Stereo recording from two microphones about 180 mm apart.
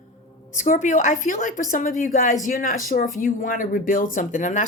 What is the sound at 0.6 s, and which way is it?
A woman's voice, 45° left (ahead or behind).